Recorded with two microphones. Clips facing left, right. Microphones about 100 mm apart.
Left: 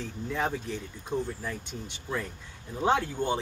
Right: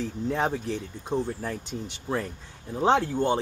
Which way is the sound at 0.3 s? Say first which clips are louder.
Right 3 dB; 35° right (ahead or behind).